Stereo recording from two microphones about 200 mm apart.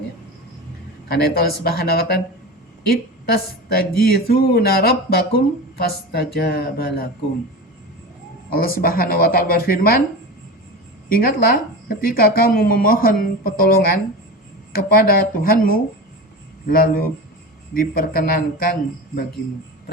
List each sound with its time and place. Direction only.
1.0 s a woman's voice: 50° left (ahead or behind)
8.4 s a woman's voice: 45° left (ahead or behind)
11.1 s a woman's voice: 45° left (ahead or behind)